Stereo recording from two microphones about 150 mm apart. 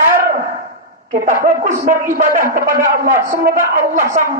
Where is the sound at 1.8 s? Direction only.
65° right (ahead or behind).